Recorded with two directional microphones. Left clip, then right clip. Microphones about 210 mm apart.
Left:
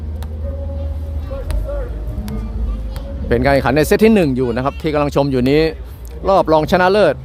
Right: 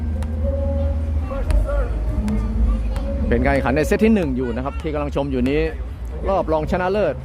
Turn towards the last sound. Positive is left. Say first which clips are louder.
# left 8 dB
turn(degrees=30)  # may be behind; listen again after turning